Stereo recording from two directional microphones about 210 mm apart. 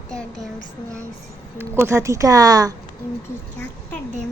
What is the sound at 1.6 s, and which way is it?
Speech, 10° right (ahead or behind).